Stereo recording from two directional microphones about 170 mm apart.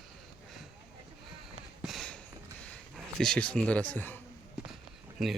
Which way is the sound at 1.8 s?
Centre (ahead or behind).